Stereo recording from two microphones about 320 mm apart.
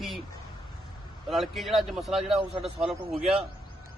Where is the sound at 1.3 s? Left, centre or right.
Centre.